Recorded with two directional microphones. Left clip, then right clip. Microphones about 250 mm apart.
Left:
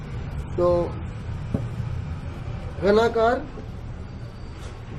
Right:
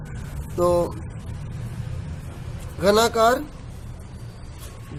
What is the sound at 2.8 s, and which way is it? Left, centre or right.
Speech, right.